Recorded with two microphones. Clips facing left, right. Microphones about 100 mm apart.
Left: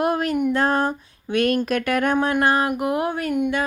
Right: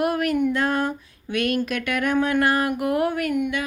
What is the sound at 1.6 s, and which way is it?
Speech, 40° left (ahead or behind).